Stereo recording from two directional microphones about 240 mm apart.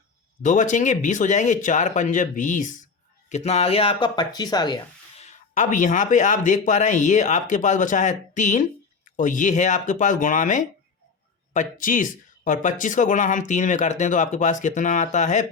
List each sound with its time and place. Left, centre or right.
0.4 s speech: left
5.2 s speech: left